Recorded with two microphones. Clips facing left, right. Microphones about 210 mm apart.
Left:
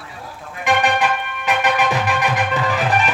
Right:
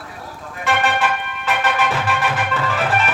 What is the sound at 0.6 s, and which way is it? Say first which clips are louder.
Music: left 2 dB; 15° left (ahead or behind).